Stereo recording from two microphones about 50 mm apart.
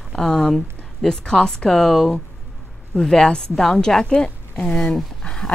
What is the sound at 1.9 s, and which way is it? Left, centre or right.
A woman's voice, centre.